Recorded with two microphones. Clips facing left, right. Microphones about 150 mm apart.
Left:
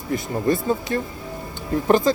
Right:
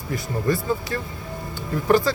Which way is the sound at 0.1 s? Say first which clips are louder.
Left 2 dB; 25° left (ahead or behind).